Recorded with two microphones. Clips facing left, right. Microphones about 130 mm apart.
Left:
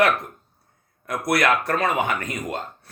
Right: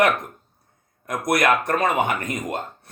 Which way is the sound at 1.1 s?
20° right (ahead or behind).